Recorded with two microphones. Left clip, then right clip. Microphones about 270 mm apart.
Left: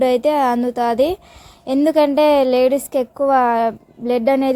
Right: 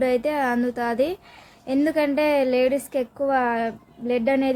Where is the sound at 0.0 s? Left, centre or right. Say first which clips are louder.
Left 7 dB; centre.